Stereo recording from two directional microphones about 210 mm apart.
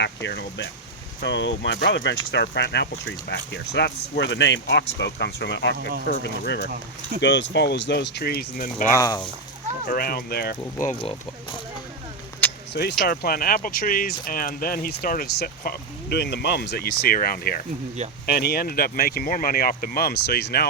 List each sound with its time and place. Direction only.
0.0 s speech: 55° left (ahead or behind)
8.9 s speech: 15° left (ahead or behind)
9.8 s speech: 45° left (ahead or behind)
12.7 s speech: 50° left (ahead or behind)